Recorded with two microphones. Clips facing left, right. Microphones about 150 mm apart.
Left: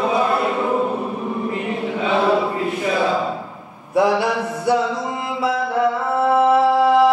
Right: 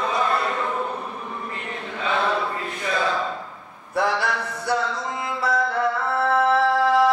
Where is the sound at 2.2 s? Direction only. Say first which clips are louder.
Left 7 dB; 10° left (ahead or behind).